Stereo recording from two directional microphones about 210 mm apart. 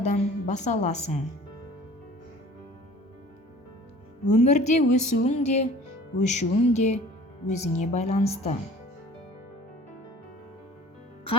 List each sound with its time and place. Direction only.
0.0 s a woman's voice: 35° left (ahead or behind)
4.3 s speech: 35° left (ahead or behind)